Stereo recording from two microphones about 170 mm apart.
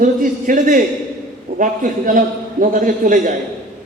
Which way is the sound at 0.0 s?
50° right (ahead or behind).